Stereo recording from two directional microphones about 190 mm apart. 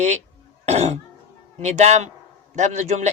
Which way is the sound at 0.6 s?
35° right (ahead or behind).